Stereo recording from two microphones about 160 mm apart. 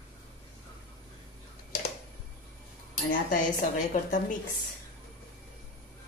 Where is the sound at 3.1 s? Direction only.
55° left (ahead or behind).